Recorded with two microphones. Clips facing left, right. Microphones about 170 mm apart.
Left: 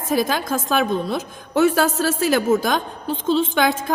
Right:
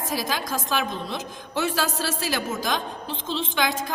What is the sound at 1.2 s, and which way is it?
A woman's voice, 45° left (ahead or behind).